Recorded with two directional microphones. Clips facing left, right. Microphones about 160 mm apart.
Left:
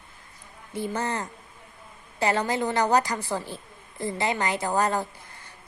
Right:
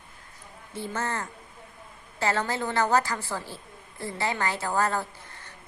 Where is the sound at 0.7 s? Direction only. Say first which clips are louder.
Left 3 dB; 15° left (ahead or behind).